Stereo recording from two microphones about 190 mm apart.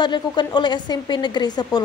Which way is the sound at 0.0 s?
25° left (ahead or behind).